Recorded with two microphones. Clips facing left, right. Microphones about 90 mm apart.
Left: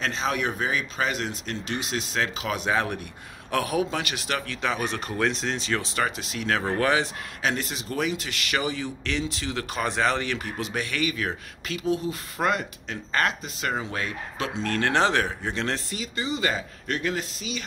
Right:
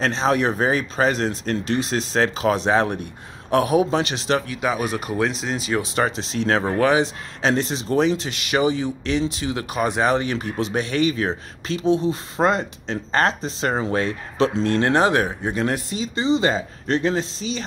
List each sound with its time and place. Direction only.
0.0 s speech: 35° right (ahead or behind)
4.5 s speech: 10° right (ahead or behind)
6.0 s speech: 30° right (ahead or behind); by 16.0 s 15° right (ahead or behind)
16.0 s speech: 25° right (ahead or behind)